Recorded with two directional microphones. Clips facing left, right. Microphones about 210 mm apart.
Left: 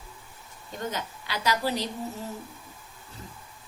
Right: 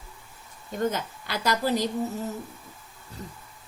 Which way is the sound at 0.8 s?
50° right (ahead or behind).